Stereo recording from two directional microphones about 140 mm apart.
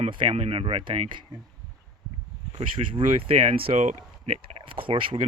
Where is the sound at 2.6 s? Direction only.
40° right (ahead or behind).